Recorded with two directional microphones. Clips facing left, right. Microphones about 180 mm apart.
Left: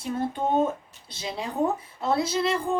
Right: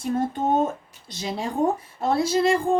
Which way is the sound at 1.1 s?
45° right (ahead or behind).